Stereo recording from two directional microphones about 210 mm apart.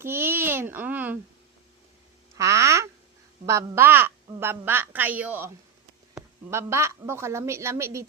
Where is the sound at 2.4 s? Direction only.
15° right (ahead or behind).